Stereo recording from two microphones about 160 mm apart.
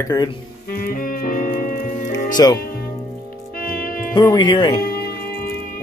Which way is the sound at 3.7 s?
65° left (ahead or behind).